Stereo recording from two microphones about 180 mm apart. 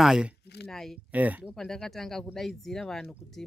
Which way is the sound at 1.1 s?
10° right (ahead or behind).